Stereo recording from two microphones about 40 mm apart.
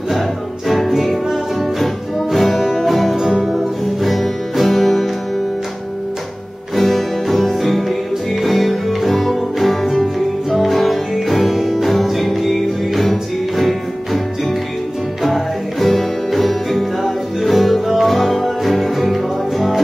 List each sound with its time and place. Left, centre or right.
0.7 s music: centre
2.3 s music: centre
6.7 s music: centre
15.2 s music: centre